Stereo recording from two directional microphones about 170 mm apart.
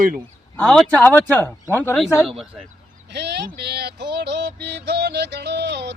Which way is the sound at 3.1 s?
80° right.